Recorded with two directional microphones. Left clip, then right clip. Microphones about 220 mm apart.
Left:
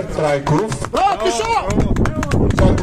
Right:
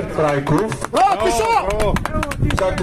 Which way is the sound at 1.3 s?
60° right (ahead or behind).